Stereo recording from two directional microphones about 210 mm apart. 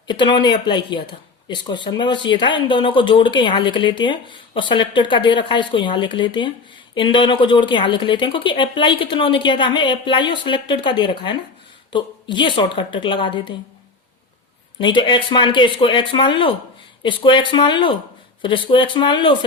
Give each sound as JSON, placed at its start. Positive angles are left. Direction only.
{"t": 0.1, "sound": "a woman's voice", "side_deg": 20}
{"t": 14.8, "sound": "a woman's voice", "side_deg": 20}